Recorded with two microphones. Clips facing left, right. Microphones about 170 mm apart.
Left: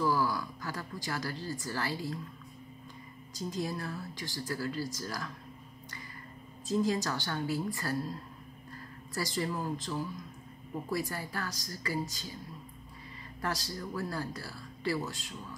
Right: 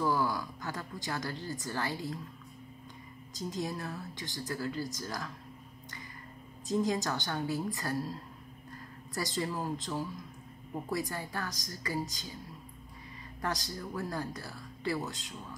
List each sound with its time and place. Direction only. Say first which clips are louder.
0.0 s a woman's voice: left 1 dB; 20° right (ahead or behind)
3.3 s a woman's voice: left 1 dB; 20° right (ahead or behind)
6.7 s a woman's voice: even; 20° right (ahead or behind)
9.1 s a woman's voice: left 1 dB; 20° right (ahead or behind)
13.4 s a woman's voice: even; 20° right (ahead or behind)